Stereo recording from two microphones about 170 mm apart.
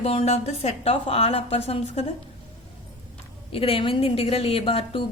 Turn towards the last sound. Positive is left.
turn(degrees=35)  # may be behind; listen again after turning